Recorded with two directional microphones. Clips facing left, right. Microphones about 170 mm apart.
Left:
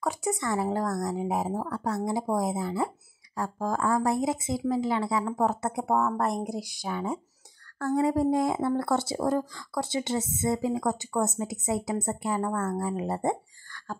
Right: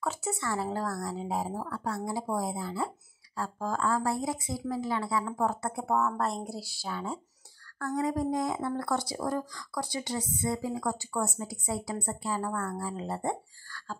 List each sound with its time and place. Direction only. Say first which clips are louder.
0.0 s speech: left 4 dB; 15° left (ahead or behind)
7.8 s speech: left 5 dB; 25° left (ahead or behind)